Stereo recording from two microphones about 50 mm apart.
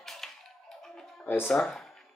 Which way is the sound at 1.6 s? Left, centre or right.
Centre.